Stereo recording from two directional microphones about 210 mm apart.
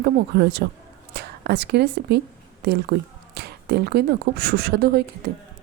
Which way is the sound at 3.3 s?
50° right (ahead or behind).